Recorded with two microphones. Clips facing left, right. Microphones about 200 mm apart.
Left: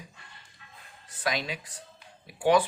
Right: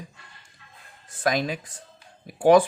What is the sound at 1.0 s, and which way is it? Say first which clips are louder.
Speech: right 7 dB; 45° right (ahead or behind).